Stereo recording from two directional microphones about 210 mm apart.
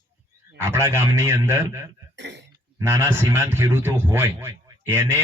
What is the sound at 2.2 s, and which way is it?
Throat clearing, 55° right (ahead or behind).